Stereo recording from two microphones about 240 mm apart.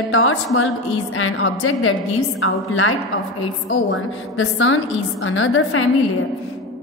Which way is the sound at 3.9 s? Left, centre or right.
Left.